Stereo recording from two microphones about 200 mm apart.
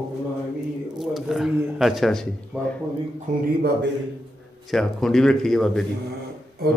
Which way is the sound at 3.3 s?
40° right (ahead or behind).